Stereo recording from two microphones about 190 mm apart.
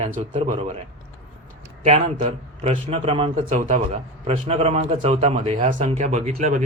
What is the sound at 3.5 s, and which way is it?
A man's voice, 40° right (ahead or behind).